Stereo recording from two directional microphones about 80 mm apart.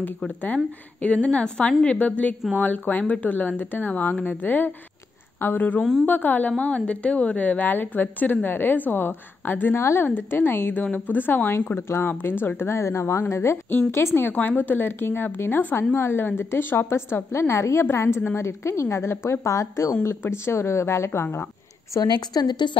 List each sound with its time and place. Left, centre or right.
1.0 s a woman's voice: centre; by 21.5 s left
21.9 s a woman's voice: left